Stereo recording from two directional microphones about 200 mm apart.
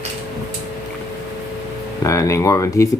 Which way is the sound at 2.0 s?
15° left (ahead or behind).